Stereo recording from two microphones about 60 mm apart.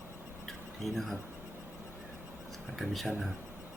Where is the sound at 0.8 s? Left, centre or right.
Centre.